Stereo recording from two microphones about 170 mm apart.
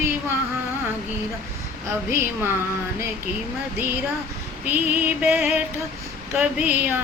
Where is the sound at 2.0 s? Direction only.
15° right (ahead or behind).